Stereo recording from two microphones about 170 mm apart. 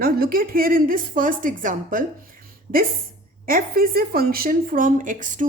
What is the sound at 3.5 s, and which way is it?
A woman's voice, 55° right (ahead or behind).